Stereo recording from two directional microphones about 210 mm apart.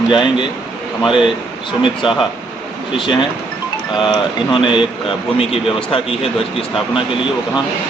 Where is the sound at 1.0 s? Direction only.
5° right (ahead or behind).